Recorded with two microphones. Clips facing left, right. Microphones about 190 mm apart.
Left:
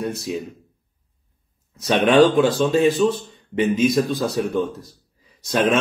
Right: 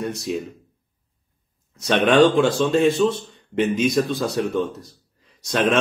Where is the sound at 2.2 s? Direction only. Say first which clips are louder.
Even; 5° left (ahead or behind).